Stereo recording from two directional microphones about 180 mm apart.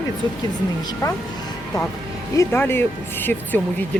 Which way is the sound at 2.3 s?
10° left (ahead or behind).